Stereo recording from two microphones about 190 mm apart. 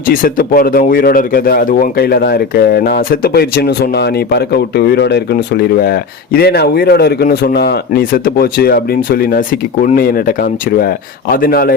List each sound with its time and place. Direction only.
0.1 s speech: 50° left (ahead or behind)